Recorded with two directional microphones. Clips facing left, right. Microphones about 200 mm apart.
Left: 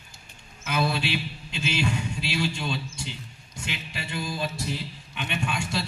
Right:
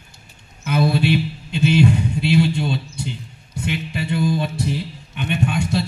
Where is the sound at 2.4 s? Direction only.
55° right (ahead or behind).